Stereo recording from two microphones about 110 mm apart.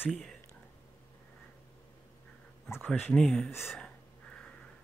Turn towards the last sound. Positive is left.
turn(degrees=0)  # may be behind; listen again after turning